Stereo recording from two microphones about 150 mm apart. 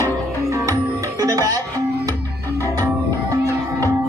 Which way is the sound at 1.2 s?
25° right (ahead or behind).